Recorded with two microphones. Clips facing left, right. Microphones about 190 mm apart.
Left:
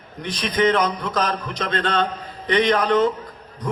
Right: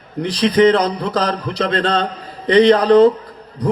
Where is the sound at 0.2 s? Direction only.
35° right (ahead or behind).